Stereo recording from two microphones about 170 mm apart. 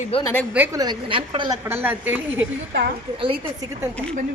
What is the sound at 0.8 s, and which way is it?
Speech, 30° right (ahead or behind).